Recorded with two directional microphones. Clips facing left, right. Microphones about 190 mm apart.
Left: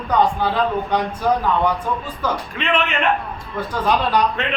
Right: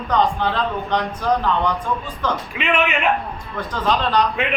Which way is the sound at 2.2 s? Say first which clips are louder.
Even; 10° left (ahead or behind).